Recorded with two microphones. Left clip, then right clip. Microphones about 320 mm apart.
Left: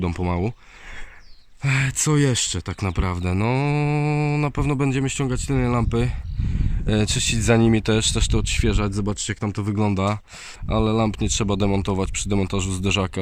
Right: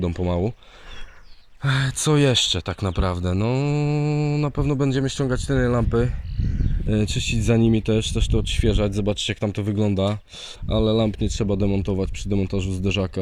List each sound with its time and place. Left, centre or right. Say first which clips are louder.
0.0 s speech: right 1 dB; centre
1.6 s speech: even; centre
2.4 s speech: right 5 dB; left
3.3 s mantra: left 1 dB; left
4.4 s speech: even; centre
7.5 s mantra: left 2 dB; left
7.9 s speech: left 2 dB; centre